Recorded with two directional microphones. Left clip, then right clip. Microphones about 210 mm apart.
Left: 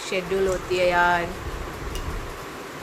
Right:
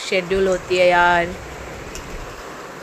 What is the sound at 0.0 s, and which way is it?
Speech, 25° right (ahead or behind).